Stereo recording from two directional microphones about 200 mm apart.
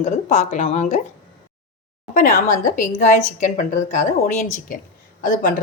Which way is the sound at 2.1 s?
45° left (ahead or behind).